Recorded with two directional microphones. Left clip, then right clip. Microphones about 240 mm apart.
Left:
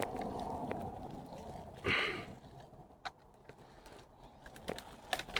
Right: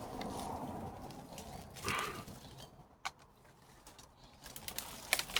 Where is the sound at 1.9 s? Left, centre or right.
Left.